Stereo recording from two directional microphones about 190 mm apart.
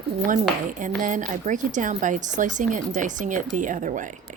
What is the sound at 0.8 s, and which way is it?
A woman's voice, 45° right (ahead or behind).